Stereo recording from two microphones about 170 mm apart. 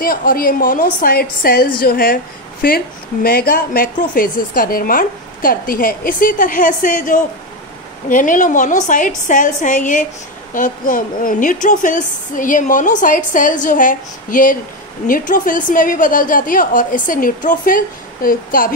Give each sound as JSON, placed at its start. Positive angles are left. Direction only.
{"t": 0.0, "sound": "a woman's voice", "side_deg": 55}